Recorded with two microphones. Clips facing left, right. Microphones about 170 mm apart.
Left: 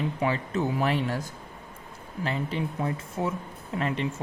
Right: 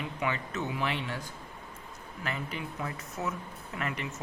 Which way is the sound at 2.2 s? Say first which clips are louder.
Left 7 dB; 30° left (ahead or behind).